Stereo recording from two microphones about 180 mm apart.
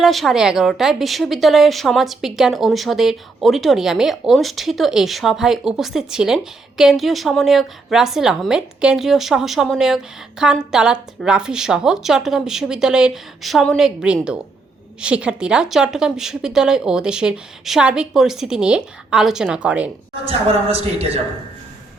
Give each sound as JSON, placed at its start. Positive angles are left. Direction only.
{"t": 0.0, "sound": "a woman's voice", "side_deg": 0}
{"t": 20.2, "sound": "a man's voice", "side_deg": -35}